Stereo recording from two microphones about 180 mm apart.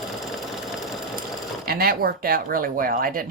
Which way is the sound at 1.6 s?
55° right (ahead or behind).